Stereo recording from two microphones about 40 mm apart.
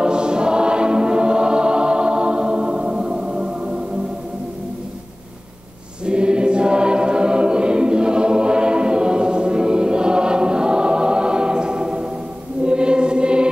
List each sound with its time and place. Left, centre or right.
0.0 s choir: right
6.0 s choir: right
12.6 s music: right